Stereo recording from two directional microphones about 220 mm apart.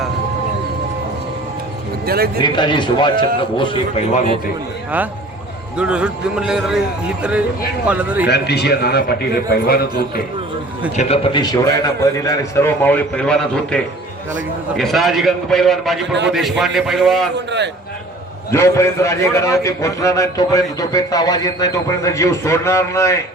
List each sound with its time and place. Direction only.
2.0 s a man's voice: 45° right (ahead or behind)
2.4 s speech: 20° left (ahead or behind)
5.7 s speech: 5° right (ahead or behind)
8.3 s a man's voice: 50° left (ahead or behind)
10.9 s a man's voice: 25° left (ahead or behind); by 13.7 s 5° left (ahead or behind)
14.8 s speech: centre (ahead or behind)
17.3 s a man's voice: 50° right (ahead or behind)
18.5 s a man's voice: 10° left (ahead or behind)